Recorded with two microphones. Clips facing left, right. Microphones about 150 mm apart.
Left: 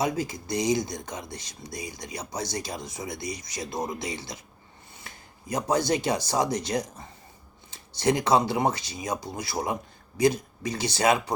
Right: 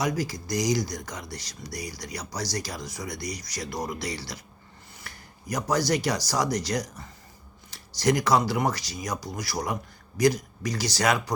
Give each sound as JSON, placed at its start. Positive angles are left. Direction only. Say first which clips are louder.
{"t": 0.0, "sound": "speech", "louder": "even", "side_deg": 25}